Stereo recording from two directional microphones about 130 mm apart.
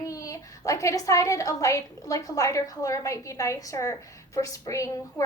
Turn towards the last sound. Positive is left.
turn(degrees=25)  # may be behind; listen again after turning